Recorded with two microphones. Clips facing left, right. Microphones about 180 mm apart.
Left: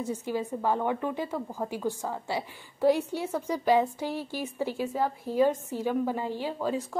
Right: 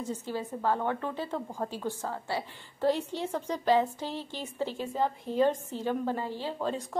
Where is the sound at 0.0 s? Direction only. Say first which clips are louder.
Left 3 dB; 10° left (ahead or behind).